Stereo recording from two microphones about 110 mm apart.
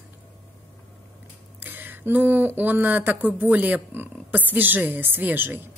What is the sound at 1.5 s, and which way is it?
A woman's voice, 15° right (ahead or behind).